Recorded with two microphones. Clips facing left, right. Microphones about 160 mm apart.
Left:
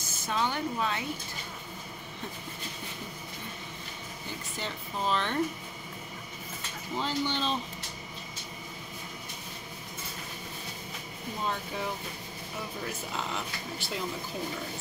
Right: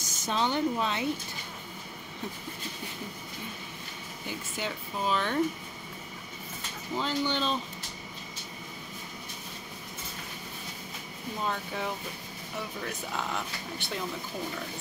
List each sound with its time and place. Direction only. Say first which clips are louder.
0.3 s a woman's voice: right 3 dB; 20° right (ahead or behind)
4.6 s speech: right 1 dB; 5° right (ahead or behind)
7.0 s speech: right 1 dB; centre (ahead or behind)
11.4 s speech: right 1 dB; centre (ahead or behind)